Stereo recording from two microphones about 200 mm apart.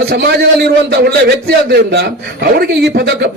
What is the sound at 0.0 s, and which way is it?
A man's voice, 55° right (ahead or behind).